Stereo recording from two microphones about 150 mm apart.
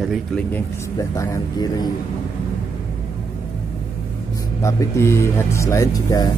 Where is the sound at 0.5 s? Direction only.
15° left (ahead or behind).